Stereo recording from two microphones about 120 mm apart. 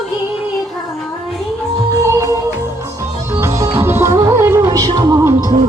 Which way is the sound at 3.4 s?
25° right (ahead or behind).